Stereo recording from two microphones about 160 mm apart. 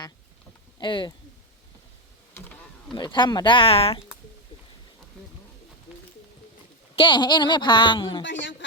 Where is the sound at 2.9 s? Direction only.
30° left (ahead or behind).